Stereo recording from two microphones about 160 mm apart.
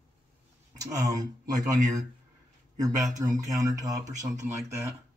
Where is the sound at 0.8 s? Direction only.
20° right (ahead or behind).